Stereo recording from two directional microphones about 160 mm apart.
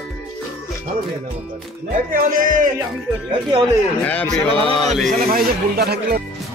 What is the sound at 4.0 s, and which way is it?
Speech, 10° left (ahead or behind).